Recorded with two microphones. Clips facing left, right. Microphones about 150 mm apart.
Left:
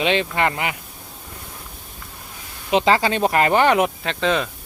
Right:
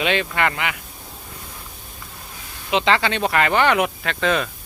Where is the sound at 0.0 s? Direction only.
30° left (ahead or behind).